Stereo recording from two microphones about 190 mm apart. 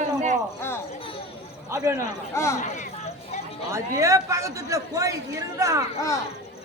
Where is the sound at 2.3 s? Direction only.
15° left (ahead or behind).